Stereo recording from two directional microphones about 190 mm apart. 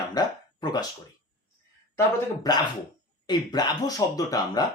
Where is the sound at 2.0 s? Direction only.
20° left (ahead or behind).